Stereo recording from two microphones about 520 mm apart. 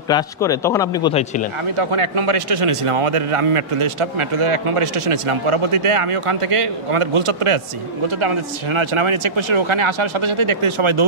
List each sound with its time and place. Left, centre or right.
0.1 s a man's voice: centre
1.6 s a man's voice: right